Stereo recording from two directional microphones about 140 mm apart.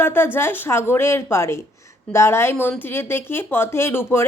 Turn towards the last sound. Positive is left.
turn(degrees=15)  # may be behind; listen again after turning